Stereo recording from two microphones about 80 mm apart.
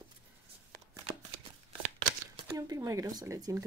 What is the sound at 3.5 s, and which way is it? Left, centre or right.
Speech, right.